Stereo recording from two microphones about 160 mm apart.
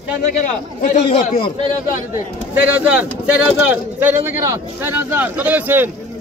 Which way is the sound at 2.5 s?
10° right (ahead or behind).